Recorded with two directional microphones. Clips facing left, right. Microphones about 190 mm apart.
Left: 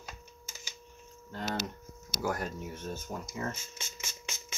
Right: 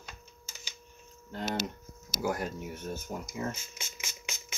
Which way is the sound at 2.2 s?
5° right (ahead or behind).